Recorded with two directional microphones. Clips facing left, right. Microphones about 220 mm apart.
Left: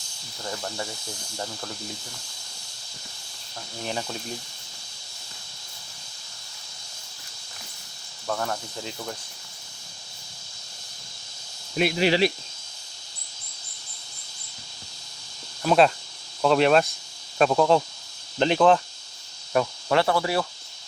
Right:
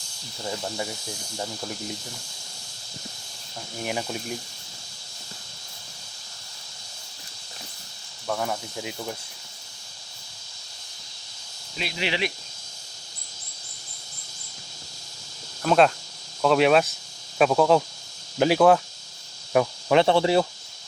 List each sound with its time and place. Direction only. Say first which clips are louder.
0.4 s cricket: right 2 dB; 15° right (ahead or behind)
3.8 s cricket: right 2 dB; 15° right (ahead or behind)
8.3 s cricket: right 1 dB; 5° right (ahead or behind)
11.8 s speech: left 8 dB; 50° left (ahead or behind)
15.6 s speech: even; centre (ahead or behind)
18.3 s cricket: right 1 dB; 5° right (ahead or behind)
19.5 s speech: right 3 dB; 20° right (ahead or behind)